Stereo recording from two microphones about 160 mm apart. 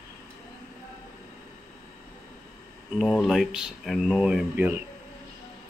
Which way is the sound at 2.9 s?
5° right (ahead or behind).